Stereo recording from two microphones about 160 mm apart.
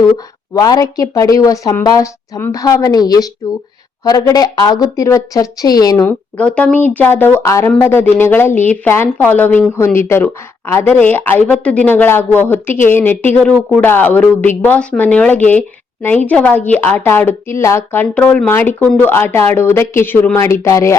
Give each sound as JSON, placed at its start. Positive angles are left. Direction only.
{"t": 0.5, "sound": "a woman's voice", "side_deg": 25}
{"t": 6.3, "sound": "speech", "side_deg": 10}